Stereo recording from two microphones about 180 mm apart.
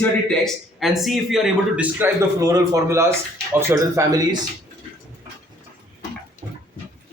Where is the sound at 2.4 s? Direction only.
20° right (ahead or behind).